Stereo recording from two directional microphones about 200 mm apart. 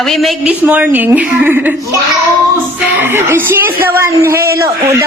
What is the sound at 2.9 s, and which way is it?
A woman's voice, 10° right (ahead or behind).